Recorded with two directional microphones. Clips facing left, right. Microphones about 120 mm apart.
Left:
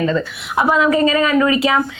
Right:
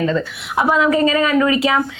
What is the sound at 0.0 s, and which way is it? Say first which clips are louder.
A woman's voice: left 1 dB; 25° left (ahead or behind).